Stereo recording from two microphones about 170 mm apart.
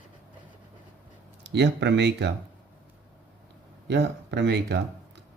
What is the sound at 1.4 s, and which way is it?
Speech, 90° right.